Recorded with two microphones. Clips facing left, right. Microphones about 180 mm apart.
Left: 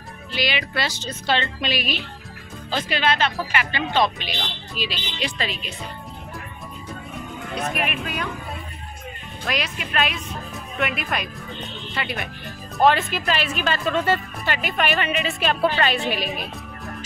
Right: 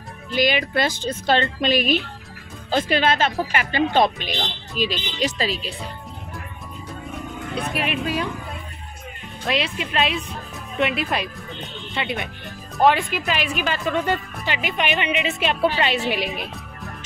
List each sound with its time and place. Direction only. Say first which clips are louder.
0.3 s a woman's voice: right 6 dB; 45° right (ahead or behind)
7.5 s speech: right 1 dB; 30° right (ahead or behind)
9.5 s a woman's voice: right 3 dB; 25° right (ahead or behind)